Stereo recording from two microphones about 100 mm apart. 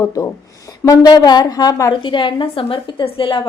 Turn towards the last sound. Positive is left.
turn(degrees=60)  # may be behind; listen again after turning